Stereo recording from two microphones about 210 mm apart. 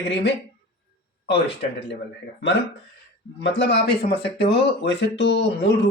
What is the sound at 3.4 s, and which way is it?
Speech, 55° left (ahead or behind).